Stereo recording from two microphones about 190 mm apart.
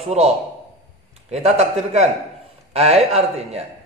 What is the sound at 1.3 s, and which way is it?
A man's voice, 35° right (ahead or behind).